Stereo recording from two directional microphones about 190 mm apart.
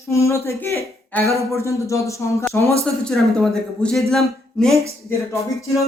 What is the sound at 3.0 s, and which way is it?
Speech, centre (ahead or behind).